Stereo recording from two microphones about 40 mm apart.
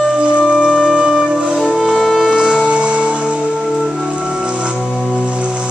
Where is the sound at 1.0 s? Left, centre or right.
Centre.